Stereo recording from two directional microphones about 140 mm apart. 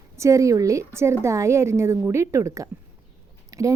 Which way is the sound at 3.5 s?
25° right (ahead or behind).